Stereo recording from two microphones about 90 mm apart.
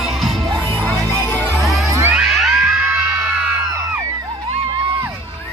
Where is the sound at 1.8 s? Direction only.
35° right (ahead or behind).